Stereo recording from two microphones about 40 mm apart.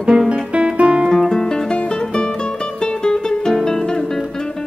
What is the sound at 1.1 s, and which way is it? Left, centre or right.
Music, centre.